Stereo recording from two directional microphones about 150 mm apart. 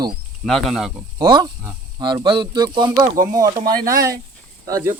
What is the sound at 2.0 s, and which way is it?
Speech, 30° right (ahead or behind).